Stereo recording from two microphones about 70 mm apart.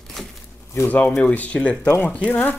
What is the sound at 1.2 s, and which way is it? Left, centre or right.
Speech, left.